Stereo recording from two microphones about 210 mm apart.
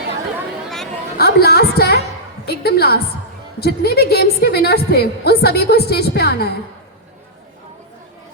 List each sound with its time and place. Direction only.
1.2 s a woman's voice: 50° left (ahead or behind)